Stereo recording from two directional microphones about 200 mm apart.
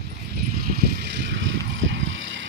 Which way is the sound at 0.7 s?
55° right (ahead or behind).